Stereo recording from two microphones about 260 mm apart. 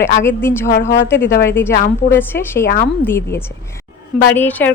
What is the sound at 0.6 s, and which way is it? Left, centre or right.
Speech, left.